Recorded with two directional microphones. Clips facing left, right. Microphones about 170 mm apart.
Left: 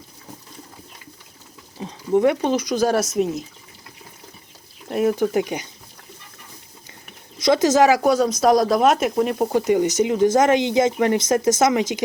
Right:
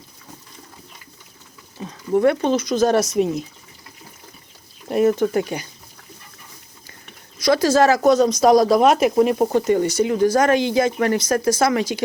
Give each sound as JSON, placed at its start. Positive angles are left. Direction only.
{"t": 1.8, "sound": "speech", "side_deg": 20}
{"t": 4.9, "sound": "speech", "side_deg": 0}
{"t": 5.1, "sound": "speech", "side_deg": 15}
{"t": 7.3, "sound": "speech", "side_deg": 20}
{"t": 9.5, "sound": "speech", "side_deg": 10}